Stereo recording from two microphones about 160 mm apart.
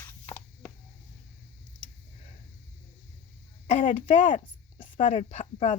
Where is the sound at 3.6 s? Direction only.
45° left (ahead or behind).